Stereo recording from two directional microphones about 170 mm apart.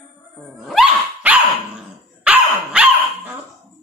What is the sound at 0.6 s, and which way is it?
Dog, centre (ahead or behind).